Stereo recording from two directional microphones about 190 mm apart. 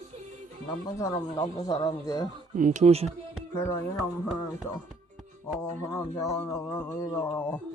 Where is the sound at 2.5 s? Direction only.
40° right (ahead or behind).